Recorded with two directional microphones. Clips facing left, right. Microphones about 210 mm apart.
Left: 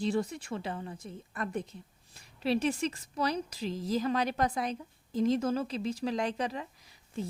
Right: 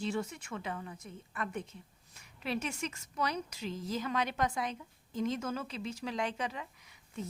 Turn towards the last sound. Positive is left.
turn(degrees=35)  # may be behind; listen again after turning